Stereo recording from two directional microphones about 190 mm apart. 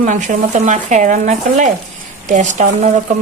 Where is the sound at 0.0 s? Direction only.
40° right (ahead or behind).